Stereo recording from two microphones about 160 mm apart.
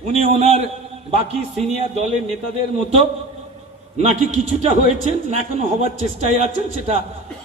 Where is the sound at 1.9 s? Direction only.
45° right (ahead or behind).